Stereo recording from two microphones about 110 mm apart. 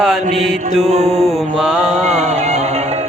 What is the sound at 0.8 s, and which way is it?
Mantra, 85° right.